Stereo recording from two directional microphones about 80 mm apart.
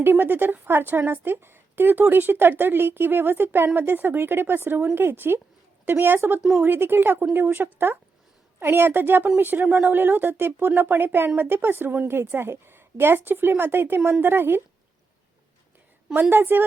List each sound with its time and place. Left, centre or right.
0.0 s a woman's voice: right
16.3 s a woman's voice: right